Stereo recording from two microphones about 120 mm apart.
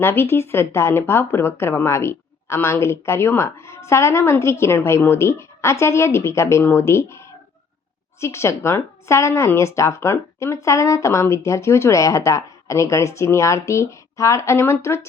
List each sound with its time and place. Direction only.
0.0 s speech: 20° left (ahead or behind)